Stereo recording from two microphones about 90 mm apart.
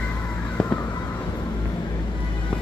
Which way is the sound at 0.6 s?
10° left (ahead or behind).